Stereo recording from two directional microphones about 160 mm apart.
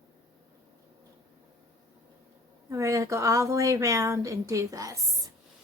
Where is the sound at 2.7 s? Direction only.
20° right (ahead or behind).